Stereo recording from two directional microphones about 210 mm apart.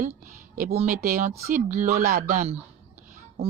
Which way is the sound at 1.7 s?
35° right (ahead or behind).